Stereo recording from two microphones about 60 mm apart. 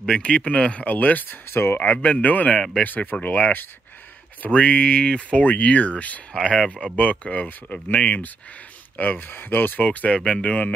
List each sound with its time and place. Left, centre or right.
0.0 s speech: centre; by 1.8 s left
1.8 s speech: left